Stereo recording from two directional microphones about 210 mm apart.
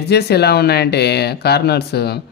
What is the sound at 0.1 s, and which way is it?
Speech, 50° left (ahead or behind).